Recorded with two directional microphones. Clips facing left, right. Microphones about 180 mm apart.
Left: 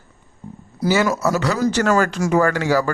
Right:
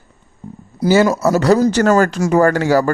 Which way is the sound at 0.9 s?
35° right (ahead or behind).